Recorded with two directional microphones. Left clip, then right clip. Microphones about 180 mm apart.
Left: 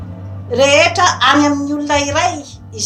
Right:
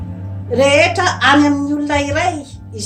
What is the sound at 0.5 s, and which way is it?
A woman's voice, 20° right (ahead or behind).